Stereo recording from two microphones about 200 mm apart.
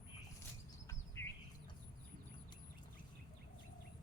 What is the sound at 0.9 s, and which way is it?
Bird vocalization, 15° left (ahead or behind).